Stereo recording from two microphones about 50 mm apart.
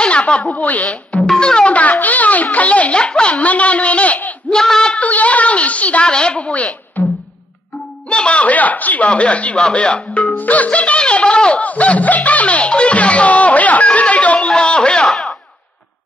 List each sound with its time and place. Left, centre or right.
0.0 s speech: left
0.8 s music: centre
1.8 s music: left
4.5 s speech: centre
4.9 s music: left
8.1 s speech: left
9.1 s music: left
9.6 s speech: centre
10.3 s music: left
14.5 s speech: centre
15.0 s speech: centre